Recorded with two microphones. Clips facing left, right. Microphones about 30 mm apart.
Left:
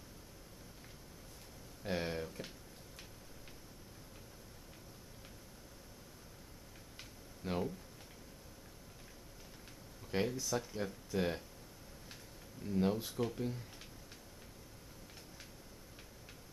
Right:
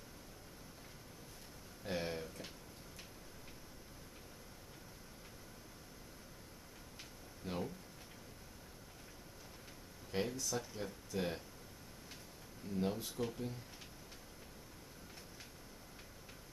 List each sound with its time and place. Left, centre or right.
1.9 s speech: centre
7.4 s speech: centre
10.1 s speech: centre
12.7 s speech: centre